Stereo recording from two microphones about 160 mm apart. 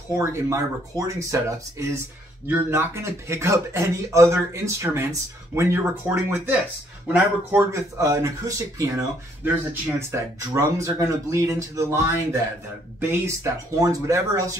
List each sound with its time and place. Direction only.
0.2 s speech: 20° right (ahead or behind)